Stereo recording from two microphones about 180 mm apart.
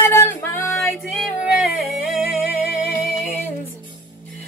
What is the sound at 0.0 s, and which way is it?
Music, 15° left (ahead or behind).